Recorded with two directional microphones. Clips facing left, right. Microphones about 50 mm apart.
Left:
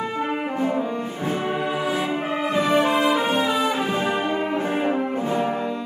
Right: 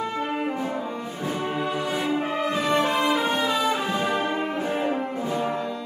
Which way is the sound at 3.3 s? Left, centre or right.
Centre.